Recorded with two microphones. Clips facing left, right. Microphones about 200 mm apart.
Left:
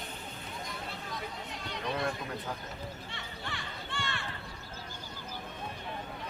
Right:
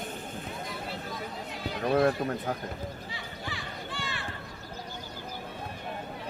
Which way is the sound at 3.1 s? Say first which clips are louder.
Right 3 dB; centre (ahead or behind).